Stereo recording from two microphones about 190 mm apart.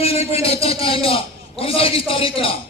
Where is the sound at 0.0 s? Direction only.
30° left (ahead or behind).